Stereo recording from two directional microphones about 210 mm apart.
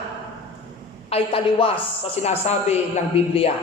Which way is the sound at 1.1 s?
25° left (ahead or behind).